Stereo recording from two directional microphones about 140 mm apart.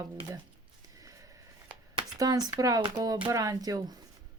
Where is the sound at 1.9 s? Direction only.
30° right (ahead or behind).